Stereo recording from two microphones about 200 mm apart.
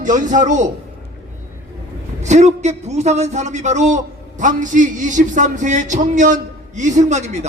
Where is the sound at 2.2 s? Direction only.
35° right (ahead or behind).